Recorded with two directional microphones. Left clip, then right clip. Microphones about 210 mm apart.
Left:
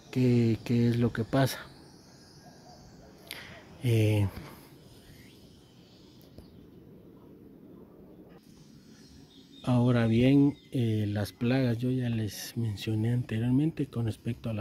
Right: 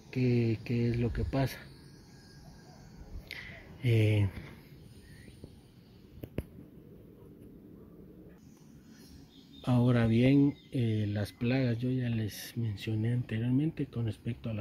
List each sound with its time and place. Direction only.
0.1 s speech: 15° left (ahead or behind)
3.3 s a sound: 5° left (ahead or behind)
9.6 s speech: 5° left (ahead or behind); by 14.6 s 20° left (ahead or behind)